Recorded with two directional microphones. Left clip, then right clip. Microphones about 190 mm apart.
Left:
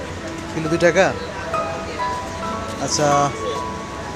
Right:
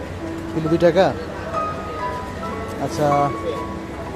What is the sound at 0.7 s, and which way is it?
Speech, 15° right (ahead or behind).